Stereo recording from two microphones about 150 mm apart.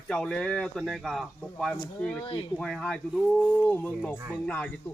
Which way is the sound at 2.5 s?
5° left (ahead or behind).